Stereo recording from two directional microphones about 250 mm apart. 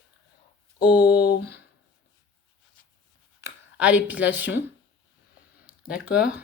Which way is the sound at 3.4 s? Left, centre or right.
Centre.